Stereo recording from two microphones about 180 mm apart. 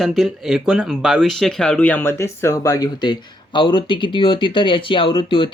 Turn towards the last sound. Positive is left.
turn(degrees=30)  # may be behind; listen again after turning